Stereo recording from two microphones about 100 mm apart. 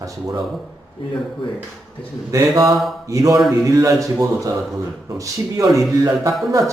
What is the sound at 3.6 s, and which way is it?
Speech, 30° right (ahead or behind).